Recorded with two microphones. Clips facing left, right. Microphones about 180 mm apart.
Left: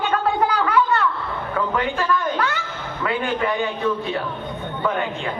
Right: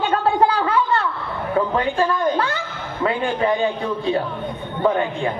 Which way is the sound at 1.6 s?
30° right (ahead or behind).